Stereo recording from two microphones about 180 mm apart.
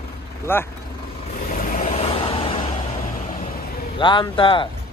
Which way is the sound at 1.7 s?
40° left (ahead or behind).